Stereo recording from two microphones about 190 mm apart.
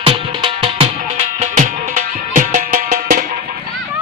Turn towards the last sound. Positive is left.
turn(degrees=-45)  # may be behind; listen again after turning